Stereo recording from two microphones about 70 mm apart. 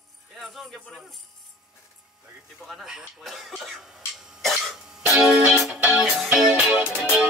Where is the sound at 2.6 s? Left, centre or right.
Centre.